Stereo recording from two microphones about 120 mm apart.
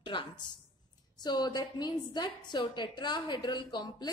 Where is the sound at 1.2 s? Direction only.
35° left (ahead or behind).